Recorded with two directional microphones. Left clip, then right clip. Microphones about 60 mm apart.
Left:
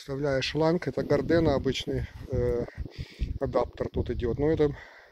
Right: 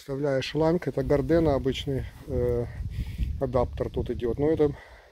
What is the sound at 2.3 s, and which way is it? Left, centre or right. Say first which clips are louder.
Speech: right 1 dB; left.